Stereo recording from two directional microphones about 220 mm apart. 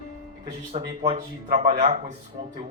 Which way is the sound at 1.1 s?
35° right (ahead or behind).